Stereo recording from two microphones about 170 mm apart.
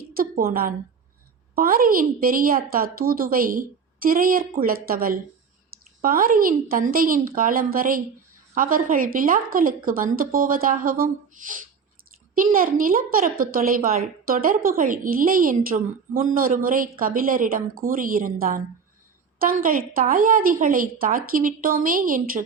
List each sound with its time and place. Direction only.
0.1 s a woman's voice: 60° right (ahead or behind)